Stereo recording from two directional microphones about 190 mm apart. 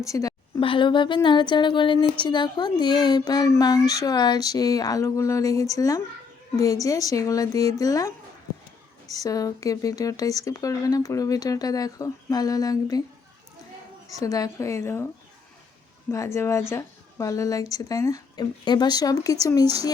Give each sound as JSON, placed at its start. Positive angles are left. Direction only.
{"t": 0.0, "sound": "speech", "side_deg": 15}
{"t": 9.1, "sound": "speech", "side_deg": 20}
{"t": 14.1, "sound": "speech", "side_deg": 20}
{"t": 16.1, "sound": "a woman's voice", "side_deg": 15}